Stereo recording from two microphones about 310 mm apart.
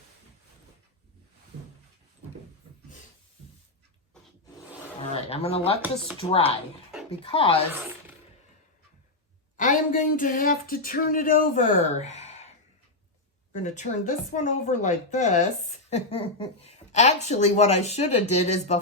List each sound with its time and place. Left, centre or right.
5.1 s speech: centre
5.8 s speech: centre
6.1 s speech: centre
9.6 s speech: left
13.5 s a woman's voice: left